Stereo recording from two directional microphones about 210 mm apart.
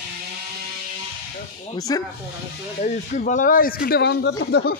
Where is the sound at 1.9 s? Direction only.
15° left (ahead or behind).